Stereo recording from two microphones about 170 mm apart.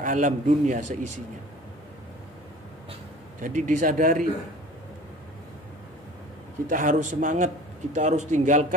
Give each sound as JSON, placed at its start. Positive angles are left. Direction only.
{"t": 0.0, "sound": "a man's voice", "side_deg": -50}
{"t": 3.3, "sound": "a man's voice", "side_deg": -50}
{"t": 6.7, "sound": "a man's voice", "side_deg": -50}